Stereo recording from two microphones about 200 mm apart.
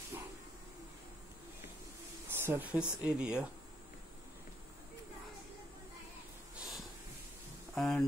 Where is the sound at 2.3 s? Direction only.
10° right (ahead or behind).